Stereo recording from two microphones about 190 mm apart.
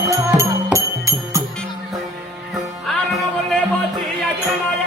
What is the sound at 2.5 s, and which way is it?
Music, centre (ahead or behind).